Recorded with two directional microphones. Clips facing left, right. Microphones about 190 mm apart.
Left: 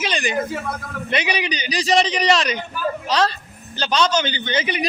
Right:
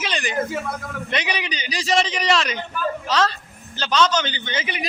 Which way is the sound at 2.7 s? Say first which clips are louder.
Even; 15° left (ahead or behind).